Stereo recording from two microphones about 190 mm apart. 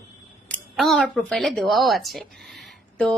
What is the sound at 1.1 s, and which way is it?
A woman's voice, centre (ahead or behind).